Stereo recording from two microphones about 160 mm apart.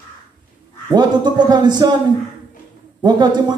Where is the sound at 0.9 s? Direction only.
25° right (ahead or behind).